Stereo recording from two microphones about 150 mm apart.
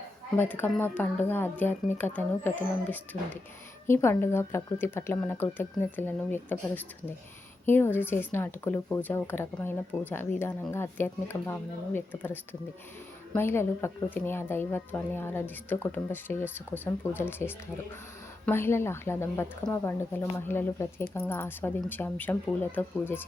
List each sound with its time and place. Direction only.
0.3 s a woman's voice: 15° left (ahead or behind)
3.8 s a woman's voice: 15° left (ahead or behind)